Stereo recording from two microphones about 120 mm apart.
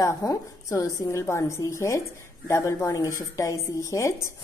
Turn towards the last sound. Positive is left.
turn(degrees=25)  # may be behind; listen again after turning